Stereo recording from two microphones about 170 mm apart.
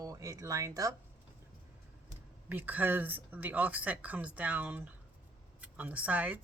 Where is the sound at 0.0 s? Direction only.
20° right (ahead or behind).